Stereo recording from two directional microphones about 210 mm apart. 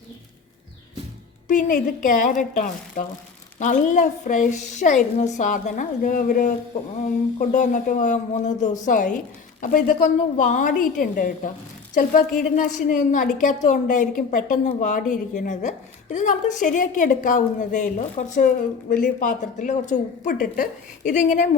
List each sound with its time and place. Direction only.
1.5 s a woman's voice: 40° left (ahead or behind)